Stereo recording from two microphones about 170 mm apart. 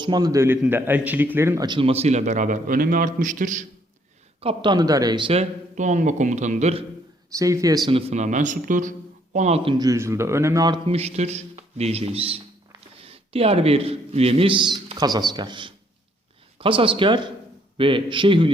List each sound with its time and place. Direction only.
0.0 s speech: 25° right (ahead or behind)
1.6 s a man's voice: 30° right (ahead or behind); by 3.7 s 50° right (ahead or behind)
4.4 s speech: 30° right (ahead or behind)
7.3 s speech: 20° right (ahead or behind); by 9.7 s 40° right (ahead or behind)
9.7 s speech: 20° right (ahead or behind)
10.8 s speech: 35° right (ahead or behind)